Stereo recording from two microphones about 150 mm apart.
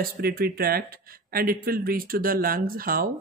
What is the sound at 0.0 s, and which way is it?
Speech, 85° right.